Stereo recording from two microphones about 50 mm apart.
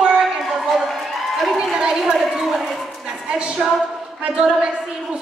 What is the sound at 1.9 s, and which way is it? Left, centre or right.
Speech, centre.